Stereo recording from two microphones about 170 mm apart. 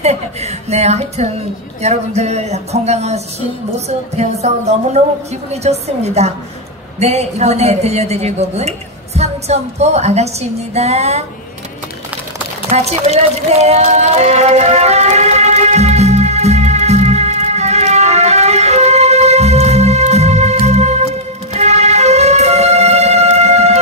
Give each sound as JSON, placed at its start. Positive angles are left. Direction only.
{"t": 0.0, "sound": "a woman's voice", "side_deg": -40}
{"t": 4.2, "sound": "a woman's voice", "side_deg": -40}
{"t": 12.7, "sound": "music", "side_deg": -40}